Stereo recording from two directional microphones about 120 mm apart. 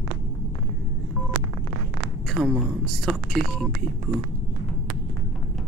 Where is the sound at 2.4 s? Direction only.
Centre (ahead or behind).